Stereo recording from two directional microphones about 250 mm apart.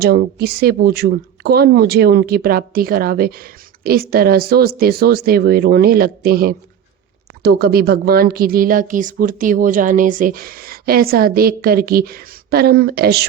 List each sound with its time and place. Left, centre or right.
0.0 s speech: right